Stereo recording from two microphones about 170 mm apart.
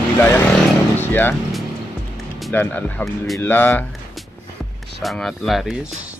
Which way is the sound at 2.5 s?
10° left (ahead or behind).